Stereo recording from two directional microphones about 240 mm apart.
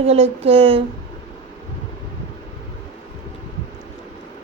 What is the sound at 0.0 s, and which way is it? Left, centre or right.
Speech, right.